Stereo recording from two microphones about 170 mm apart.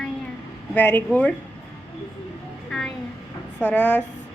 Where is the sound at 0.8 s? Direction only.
10° left (ahead or behind).